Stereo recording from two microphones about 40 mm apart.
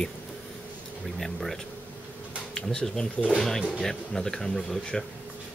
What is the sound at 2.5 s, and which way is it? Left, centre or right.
Speech, centre.